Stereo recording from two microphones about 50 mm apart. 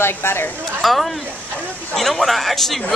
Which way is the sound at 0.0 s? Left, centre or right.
Left.